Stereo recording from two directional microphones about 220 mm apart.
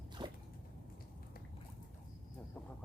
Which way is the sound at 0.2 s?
15° right (ahead or behind).